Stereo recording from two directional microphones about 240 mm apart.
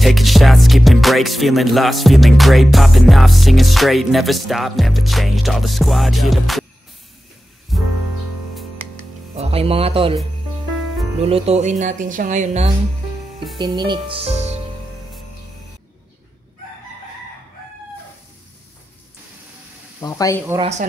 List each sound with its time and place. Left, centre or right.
0.0 s music: centre
7.7 s music: centre
9.3 s speech: right
11.2 s speech: right
13.6 s speech: centre
20.0 s speech: centre